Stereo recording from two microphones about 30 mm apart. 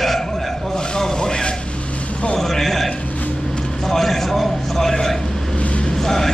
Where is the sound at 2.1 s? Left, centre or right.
Left.